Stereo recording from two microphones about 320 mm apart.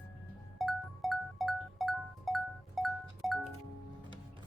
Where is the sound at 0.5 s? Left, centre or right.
Centre.